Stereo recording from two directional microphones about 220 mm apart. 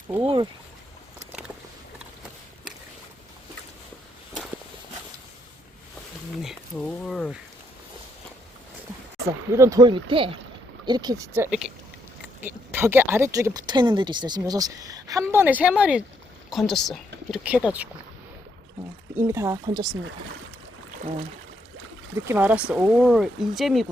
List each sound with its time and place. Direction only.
6.4 s a sound: centre (ahead or behind)
9.6 s speech: 15° right (ahead or behind)
11.6 s a sound: 5° right (ahead or behind)
12.4 s speech: 10° right (ahead or behind)
19.1 s speech: 10° right (ahead or behind)
22.1 s speech: 10° right (ahead or behind)